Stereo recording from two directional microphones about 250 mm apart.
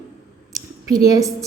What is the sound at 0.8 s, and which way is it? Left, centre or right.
Speech, centre.